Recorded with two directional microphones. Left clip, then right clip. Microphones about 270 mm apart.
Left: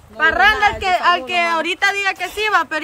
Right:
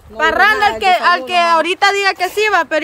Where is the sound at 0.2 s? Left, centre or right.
Right.